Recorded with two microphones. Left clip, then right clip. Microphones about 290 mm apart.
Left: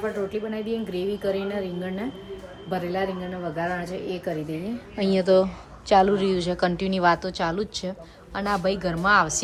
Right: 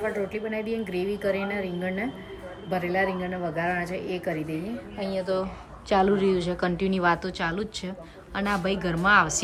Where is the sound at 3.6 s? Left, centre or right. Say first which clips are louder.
Right 1 dB; centre.